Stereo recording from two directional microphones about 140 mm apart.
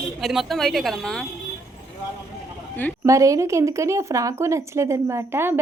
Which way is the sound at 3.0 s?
20° right (ahead or behind).